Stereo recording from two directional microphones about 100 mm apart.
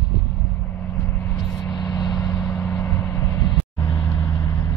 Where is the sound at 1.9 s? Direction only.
40° left (ahead or behind).